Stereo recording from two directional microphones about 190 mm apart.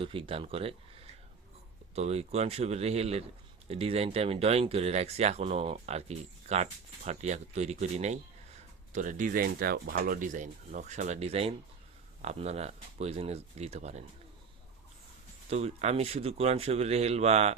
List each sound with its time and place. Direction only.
0.0 s speech: 30° right (ahead or behind)
2.0 s speech: 35° right (ahead or behind)
15.4 s speech: 35° right (ahead or behind)